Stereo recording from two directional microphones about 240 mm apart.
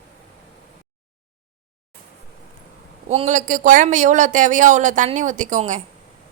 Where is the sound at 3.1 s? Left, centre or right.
Right.